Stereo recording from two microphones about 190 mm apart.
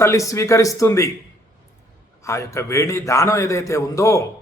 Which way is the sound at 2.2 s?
15° left (ahead or behind).